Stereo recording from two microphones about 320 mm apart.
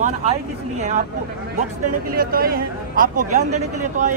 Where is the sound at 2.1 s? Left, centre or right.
Right.